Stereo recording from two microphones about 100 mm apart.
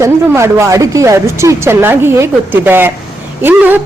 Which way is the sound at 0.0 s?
30° right (ahead or behind).